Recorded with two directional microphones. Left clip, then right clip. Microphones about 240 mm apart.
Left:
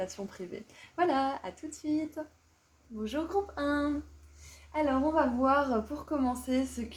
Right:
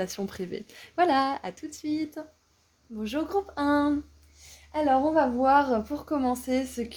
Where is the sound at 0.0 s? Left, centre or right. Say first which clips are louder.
Right 5 dB; right.